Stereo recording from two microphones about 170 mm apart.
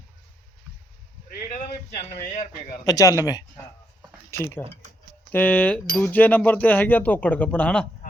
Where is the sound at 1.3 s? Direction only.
60° left (ahead or behind).